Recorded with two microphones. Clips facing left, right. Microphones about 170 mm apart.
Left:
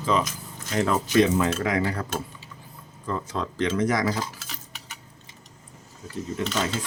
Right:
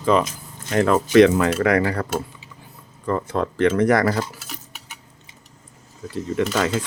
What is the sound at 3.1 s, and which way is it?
Speech, 55° right (ahead or behind).